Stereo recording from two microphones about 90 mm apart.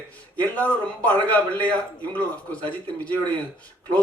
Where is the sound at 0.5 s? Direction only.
20° left (ahead or behind).